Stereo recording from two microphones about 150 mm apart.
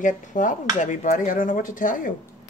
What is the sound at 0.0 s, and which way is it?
Speech, 60° left (ahead or behind).